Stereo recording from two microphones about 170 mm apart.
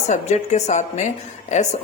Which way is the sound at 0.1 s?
45° left (ahead or behind).